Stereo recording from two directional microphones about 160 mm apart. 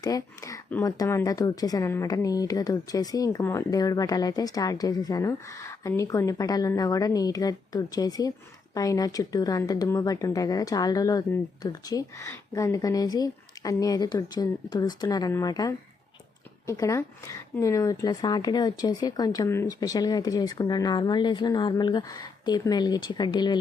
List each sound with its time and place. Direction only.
0.0 s speech: 20° left (ahead or behind)